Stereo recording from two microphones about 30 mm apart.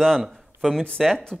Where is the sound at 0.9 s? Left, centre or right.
Centre.